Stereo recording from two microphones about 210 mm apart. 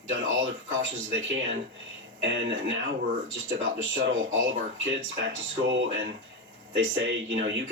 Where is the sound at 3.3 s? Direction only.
65° right (ahead or behind).